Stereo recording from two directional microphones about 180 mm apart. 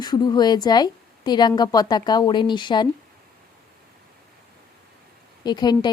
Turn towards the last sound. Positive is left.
turn(degrees=25)  # may be behind; listen again after turning